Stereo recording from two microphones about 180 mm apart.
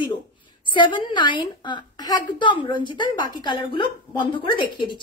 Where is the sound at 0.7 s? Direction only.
25° left (ahead or behind).